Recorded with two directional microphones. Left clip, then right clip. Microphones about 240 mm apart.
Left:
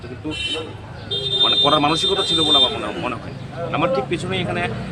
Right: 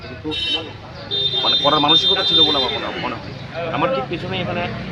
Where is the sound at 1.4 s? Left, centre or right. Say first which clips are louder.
Even; centre.